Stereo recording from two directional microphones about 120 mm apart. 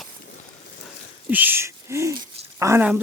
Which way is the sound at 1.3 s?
15° right (ahead or behind).